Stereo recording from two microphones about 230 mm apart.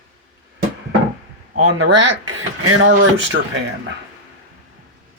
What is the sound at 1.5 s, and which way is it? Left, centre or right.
Speech, right.